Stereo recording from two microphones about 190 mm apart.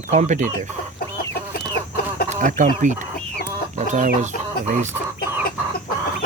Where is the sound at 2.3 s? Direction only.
40° right (ahead or behind).